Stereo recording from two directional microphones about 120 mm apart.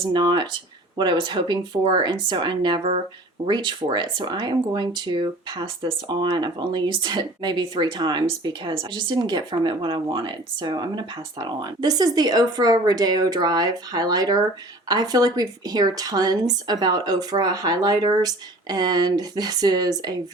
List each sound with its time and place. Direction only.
0.1 s speech: 40° right (ahead or behind)